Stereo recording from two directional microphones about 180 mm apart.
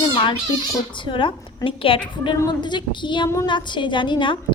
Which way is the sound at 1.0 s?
25° left (ahead or behind).